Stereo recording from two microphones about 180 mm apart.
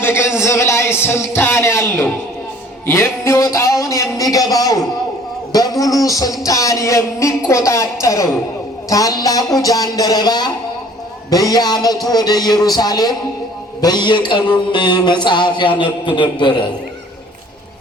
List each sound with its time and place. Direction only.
0.0 s a man's voice: 15° left (ahead or behind)
5.5 s a sound: 20° left (ahead or behind)
6.0 s a man's voice: 20° left (ahead or behind)